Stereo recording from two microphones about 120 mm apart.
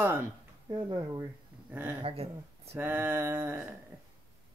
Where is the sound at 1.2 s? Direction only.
20° right (ahead or behind).